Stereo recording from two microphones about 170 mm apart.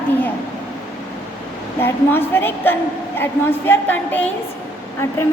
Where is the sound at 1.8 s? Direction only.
15° left (ahead or behind).